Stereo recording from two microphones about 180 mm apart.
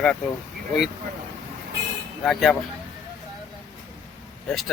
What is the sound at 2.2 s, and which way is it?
Speech, centre (ahead or behind).